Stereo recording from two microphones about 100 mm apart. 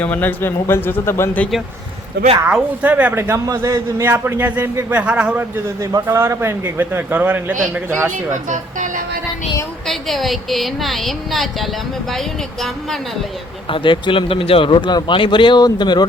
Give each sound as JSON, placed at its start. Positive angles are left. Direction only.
{"t": 0.0, "sound": "a man's voice", "side_deg": 15}
{"t": 2.5, "sound": "a man's voice", "side_deg": -15}
{"t": 5.6, "sound": "a man's voice", "side_deg": -35}
{"t": 9.8, "sound": "a woman's voice", "side_deg": 0}
{"t": 13.7, "sound": "a man's voice", "side_deg": 55}